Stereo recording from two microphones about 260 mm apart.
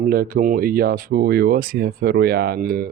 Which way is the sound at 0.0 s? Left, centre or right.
Right.